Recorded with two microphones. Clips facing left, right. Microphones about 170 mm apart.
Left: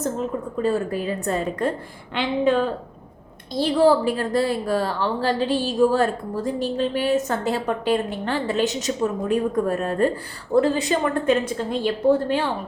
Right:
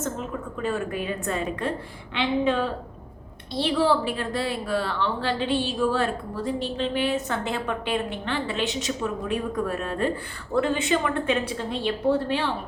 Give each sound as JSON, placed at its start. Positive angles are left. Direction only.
{"t": 0.6, "sound": "a woman's voice", "side_deg": 35}